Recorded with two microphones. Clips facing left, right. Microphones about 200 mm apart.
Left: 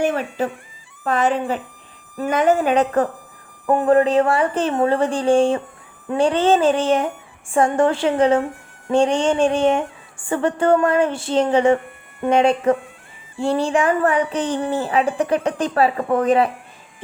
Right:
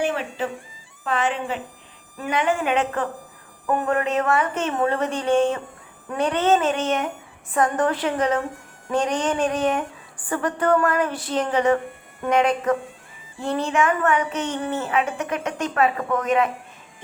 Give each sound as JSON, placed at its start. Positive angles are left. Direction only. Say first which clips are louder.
{"t": 0.0, "sound": "speech", "louder": "left 4 dB", "side_deg": 45}